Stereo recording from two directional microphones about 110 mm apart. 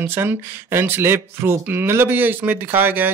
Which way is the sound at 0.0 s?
20° right (ahead or behind).